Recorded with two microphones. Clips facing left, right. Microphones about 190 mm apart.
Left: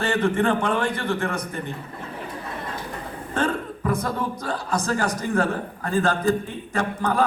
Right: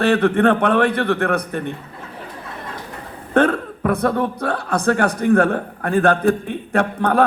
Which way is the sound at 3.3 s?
65° right (ahead or behind).